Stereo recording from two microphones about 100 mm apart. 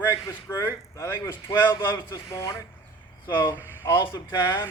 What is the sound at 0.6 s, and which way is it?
Speech, 30° left (ahead or behind).